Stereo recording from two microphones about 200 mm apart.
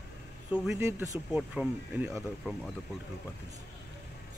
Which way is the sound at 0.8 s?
15° right (ahead or behind).